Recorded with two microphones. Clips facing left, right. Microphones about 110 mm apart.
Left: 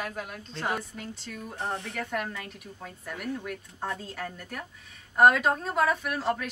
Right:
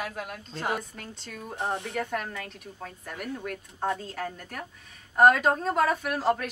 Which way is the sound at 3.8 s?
20° right (ahead or behind).